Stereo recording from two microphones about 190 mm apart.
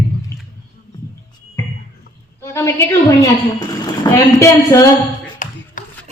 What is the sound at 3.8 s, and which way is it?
A woman's voice, 20° left (ahead or behind).